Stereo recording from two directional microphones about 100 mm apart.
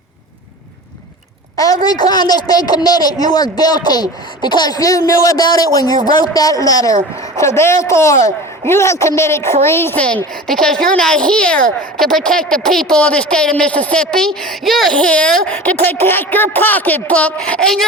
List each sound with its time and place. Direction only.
1.5 s speech: 35° left (ahead or behind)
10.4 s speech: 5° left (ahead or behind)
14.9 s speech: 10° left (ahead or behind)